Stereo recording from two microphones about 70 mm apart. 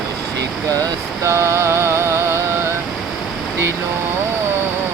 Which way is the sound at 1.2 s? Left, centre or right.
Right.